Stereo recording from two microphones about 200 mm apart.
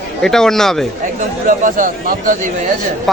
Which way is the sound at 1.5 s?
40° right (ahead or behind).